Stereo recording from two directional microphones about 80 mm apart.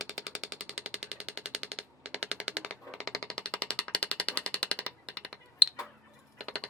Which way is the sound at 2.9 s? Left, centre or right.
Centre.